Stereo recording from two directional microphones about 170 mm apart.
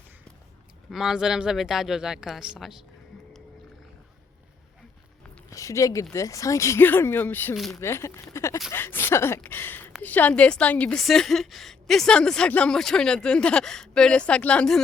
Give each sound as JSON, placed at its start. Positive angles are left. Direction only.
{"t": 0.9, "sound": "a woman's voice", "side_deg": 0}
{"t": 5.5, "sound": "speech", "side_deg": 20}
{"t": 7.5, "sound": "a woman's voice", "side_deg": 0}
{"t": 7.8, "sound": "a woman's voice", "side_deg": 15}